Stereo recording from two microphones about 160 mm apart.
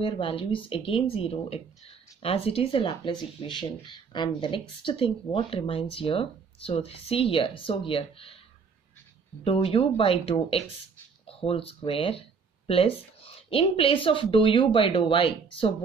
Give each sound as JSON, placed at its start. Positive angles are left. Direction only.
{"t": 0.0, "sound": "speech", "side_deg": 35}
{"t": 9.4, "sound": "speech", "side_deg": 35}